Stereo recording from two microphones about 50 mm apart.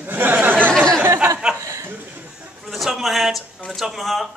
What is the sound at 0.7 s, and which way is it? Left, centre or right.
Chatter, centre.